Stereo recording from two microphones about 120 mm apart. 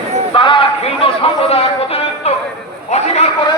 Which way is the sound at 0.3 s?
45° left (ahead or behind).